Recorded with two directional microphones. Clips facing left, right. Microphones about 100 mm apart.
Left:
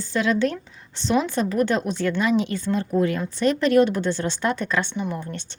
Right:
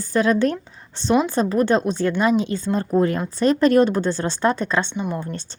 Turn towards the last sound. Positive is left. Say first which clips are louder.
# right 3 dB
turn(degrees=-35)  # may be behind; listen again after turning